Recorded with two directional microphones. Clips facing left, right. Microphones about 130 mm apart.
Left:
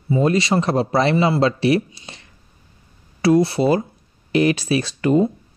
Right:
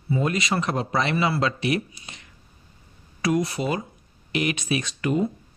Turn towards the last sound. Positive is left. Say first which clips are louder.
# left 7 dB
turn(degrees=30)  # may be behind; listen again after turning